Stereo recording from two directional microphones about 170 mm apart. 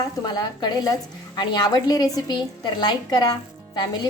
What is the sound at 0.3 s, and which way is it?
A woman's voice, 25° left (ahead or behind).